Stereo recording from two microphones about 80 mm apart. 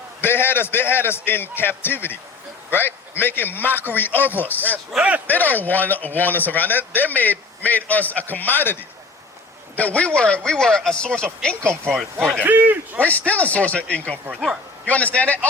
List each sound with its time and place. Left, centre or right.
0.2 s a man's voice: left
5.0 s a man's voice: centre
5.3 s a man's voice: left
12.3 s a man's voice: right
13.0 s a man's voice: centre